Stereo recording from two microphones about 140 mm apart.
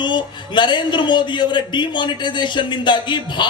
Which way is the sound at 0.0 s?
35° left (ahead or behind).